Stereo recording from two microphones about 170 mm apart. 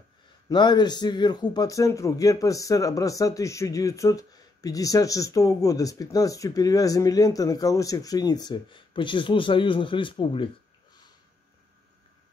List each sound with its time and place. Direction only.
0.5 s a man's voice: 25° left (ahead or behind)